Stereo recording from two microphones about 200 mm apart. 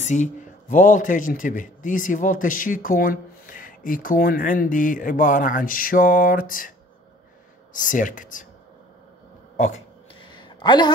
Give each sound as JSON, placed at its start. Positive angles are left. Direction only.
{"t": 0.0, "sound": "a man's voice", "side_deg": 35}
{"t": 7.7, "sound": "speech", "side_deg": 40}
{"t": 10.2, "sound": "a sound", "side_deg": 25}